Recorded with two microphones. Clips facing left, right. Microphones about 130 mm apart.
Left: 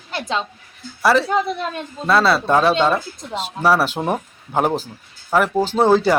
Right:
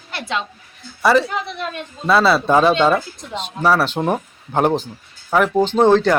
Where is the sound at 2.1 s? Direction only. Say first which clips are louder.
Right 1 dB; centre (ahead or behind).